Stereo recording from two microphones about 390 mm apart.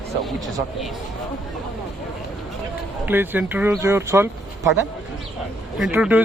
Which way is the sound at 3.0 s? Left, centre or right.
Centre.